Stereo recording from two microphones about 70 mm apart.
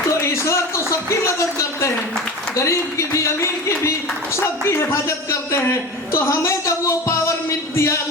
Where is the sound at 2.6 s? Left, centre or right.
Left.